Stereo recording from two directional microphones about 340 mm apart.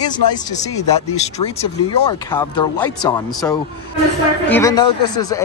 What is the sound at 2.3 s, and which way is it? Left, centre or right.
Speech, centre.